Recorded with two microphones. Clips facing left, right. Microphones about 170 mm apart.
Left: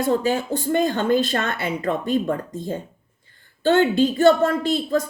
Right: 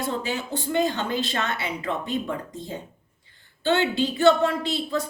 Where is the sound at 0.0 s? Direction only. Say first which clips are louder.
Left 8 dB; 45° left (ahead or behind).